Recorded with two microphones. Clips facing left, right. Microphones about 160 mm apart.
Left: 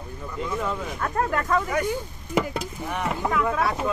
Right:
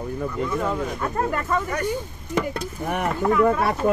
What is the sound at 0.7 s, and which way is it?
A man's voice, 5° right (ahead or behind).